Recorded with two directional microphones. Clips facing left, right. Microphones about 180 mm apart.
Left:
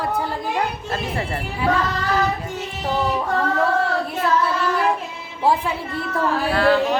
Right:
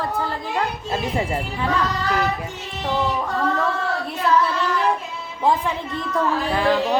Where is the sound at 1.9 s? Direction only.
20° right (ahead or behind).